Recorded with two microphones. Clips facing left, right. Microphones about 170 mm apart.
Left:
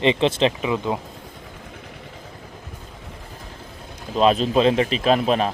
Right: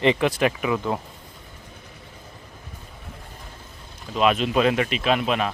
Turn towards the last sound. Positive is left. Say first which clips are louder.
# left 4 dB
turn(degrees=35)  # may be behind; listen again after turning